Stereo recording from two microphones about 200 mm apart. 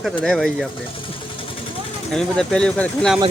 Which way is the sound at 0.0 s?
5° left (ahead or behind).